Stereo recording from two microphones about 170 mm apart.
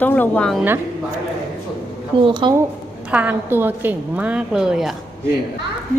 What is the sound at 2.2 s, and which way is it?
Speech, 30° right (ahead or behind).